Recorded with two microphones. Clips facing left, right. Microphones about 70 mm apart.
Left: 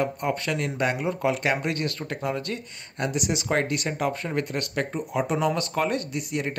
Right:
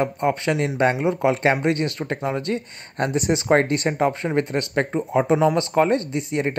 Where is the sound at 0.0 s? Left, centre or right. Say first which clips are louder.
Right 5 dB; right.